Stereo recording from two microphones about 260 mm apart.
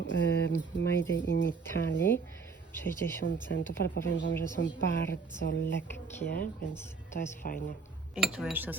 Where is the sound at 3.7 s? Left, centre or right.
Left.